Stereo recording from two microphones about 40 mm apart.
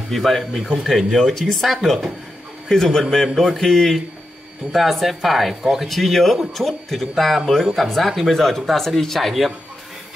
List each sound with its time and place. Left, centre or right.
0.1 s speech: centre
2.7 s a man's voice: centre